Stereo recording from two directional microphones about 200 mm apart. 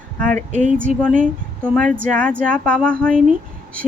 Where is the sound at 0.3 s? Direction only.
35° right (ahead or behind).